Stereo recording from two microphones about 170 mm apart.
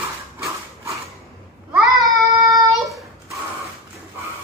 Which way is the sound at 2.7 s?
Centre (ahead or behind).